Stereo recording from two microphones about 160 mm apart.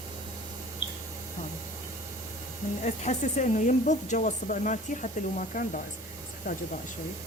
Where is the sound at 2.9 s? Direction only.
45° left (ahead or behind).